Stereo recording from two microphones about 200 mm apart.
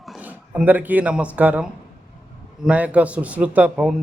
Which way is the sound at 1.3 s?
5° right (ahead or behind).